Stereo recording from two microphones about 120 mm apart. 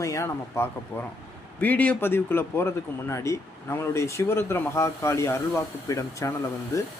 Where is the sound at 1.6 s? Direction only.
10° left (ahead or behind).